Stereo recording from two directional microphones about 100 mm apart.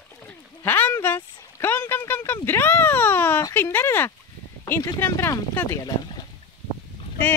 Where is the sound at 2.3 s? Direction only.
20° left (ahead or behind).